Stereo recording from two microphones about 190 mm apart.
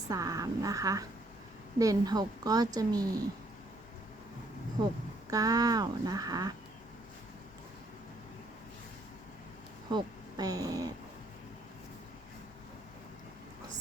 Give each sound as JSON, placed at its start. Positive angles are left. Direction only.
{"t": 0.1, "sound": "a woman's voice", "side_deg": -20}
{"t": 5.3, "sound": "a woman's voice", "side_deg": -20}
{"t": 9.9, "sound": "speech", "side_deg": -20}